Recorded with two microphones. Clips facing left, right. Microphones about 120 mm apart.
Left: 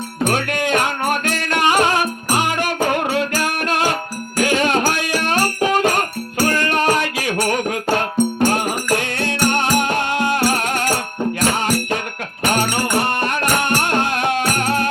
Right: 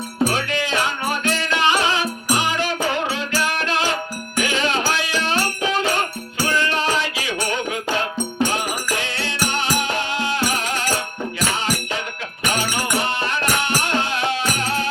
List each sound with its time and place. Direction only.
0.3 s music: 55° left (ahead or behind)
12.4 s music: 50° left (ahead or behind)